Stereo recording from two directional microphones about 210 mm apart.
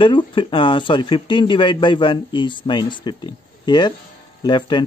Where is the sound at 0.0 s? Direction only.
25° left (ahead or behind).